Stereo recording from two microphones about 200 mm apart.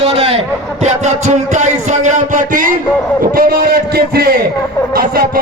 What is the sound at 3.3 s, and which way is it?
Music, 45° right (ahead or behind).